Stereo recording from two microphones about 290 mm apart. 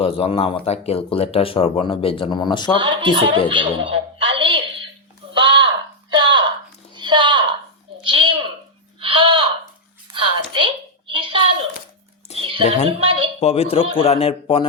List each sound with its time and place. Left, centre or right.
0.0 s speech: centre
2.7 s speech: centre
3.5 s a sound: centre
12.4 s music: centre
12.6 s a woman's voice: left
13.0 s a sound: centre
13.4 s speech: left